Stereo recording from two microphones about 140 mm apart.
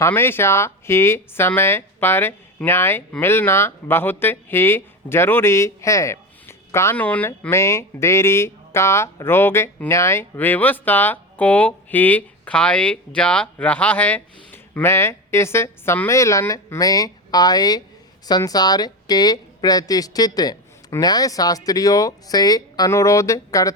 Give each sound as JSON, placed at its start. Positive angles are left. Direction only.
{"t": 0.0, "sound": "a woman's voice", "side_deg": 15}